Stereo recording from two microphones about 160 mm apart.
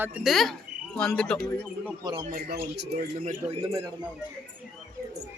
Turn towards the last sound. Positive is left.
turn(degrees=-40)  # may be behind; listen again after turning